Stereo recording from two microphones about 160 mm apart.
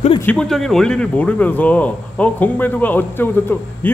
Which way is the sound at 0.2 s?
5° left (ahead or behind).